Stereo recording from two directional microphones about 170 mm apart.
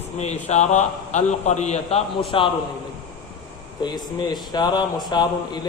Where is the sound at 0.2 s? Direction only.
40° left (ahead or behind).